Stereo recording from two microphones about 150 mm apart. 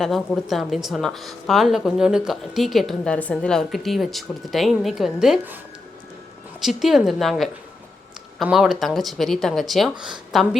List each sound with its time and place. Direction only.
0.4 s speech: centre (ahead or behind)
6.6 s speech: centre (ahead or behind)